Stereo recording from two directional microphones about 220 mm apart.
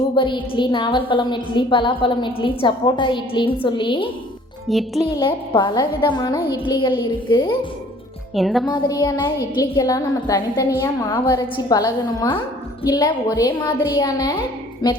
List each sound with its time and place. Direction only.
0.2 s a woman's voice: 20° left (ahead or behind)
4.7 s a child's voice: centre (ahead or behind)
5.1 s a woman's voice: 20° left (ahead or behind)
8.4 s a child's voice: centre (ahead or behind)
8.6 s a woman's voice: 20° left (ahead or behind)